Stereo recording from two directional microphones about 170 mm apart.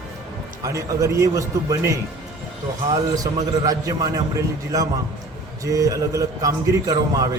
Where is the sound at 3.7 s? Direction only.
20° right (ahead or behind).